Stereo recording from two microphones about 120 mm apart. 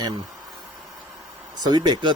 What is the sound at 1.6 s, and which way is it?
Speech, 35° right (ahead or behind).